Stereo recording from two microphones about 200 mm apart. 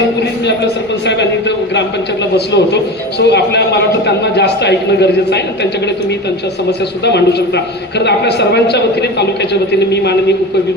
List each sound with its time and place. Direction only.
2.3 s a man's voice: 55° left (ahead or behind)
7.1 s a man's voice: 55° left (ahead or behind)